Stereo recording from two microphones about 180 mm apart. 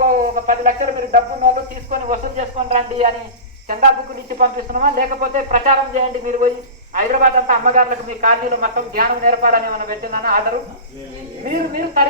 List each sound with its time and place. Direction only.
0.0 s a man's voice: 50° right (ahead or behind); by 3.1 s 35° right (ahead or behind)
4.4 s a man's voice: 50° right (ahead or behind)
11.4 s speech: 55° right (ahead or behind)